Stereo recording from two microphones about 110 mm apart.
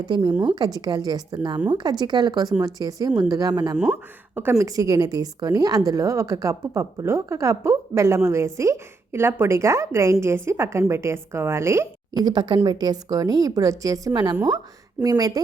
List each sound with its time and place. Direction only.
0.0 s a woman's voice: 45° right (ahead or behind)
4.4 s a woman's voice: 25° right (ahead or behind)
12.1 s a woman's voice: 40° right (ahead or behind)
15.0 s speech: 15° right (ahead or behind)